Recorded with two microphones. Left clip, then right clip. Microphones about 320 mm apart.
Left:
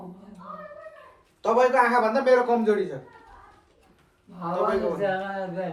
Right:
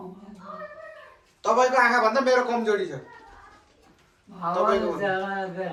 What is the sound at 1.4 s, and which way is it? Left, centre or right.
A man's voice, left.